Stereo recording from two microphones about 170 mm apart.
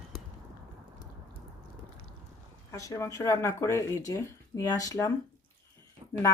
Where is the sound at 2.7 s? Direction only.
20° left (ahead or behind).